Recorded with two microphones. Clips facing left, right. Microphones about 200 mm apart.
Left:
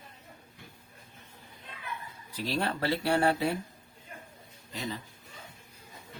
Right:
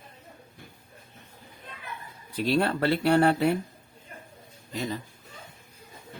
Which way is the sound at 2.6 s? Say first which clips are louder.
Right 4 dB; 65° right (ahead or behind).